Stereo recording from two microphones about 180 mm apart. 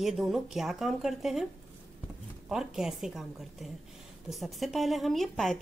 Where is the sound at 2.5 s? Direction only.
5° right (ahead or behind).